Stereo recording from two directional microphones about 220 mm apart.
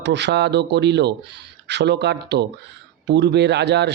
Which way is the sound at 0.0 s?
50° right (ahead or behind).